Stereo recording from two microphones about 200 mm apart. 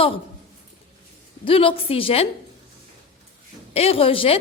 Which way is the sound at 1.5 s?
25° left (ahead or behind).